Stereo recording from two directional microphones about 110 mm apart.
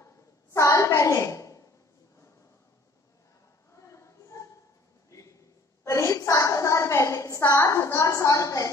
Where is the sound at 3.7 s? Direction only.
25° left (ahead or behind).